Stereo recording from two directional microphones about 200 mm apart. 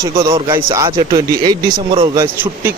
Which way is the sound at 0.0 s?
15° right (ahead or behind).